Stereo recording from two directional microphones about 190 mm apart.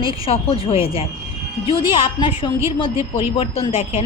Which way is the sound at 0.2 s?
30° left (ahead or behind).